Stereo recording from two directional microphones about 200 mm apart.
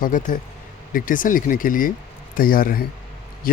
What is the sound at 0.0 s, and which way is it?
A man's voice, 40° left (ahead or behind).